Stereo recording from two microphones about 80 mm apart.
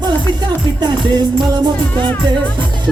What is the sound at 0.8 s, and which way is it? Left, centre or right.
Music, right.